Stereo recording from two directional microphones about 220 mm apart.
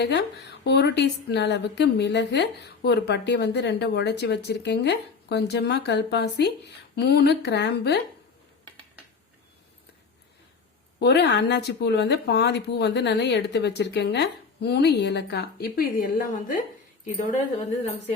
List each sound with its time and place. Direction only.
0.0 s a woman's voice: 50° left (ahead or behind)
11.0 s a woman's voice: 50° left (ahead or behind)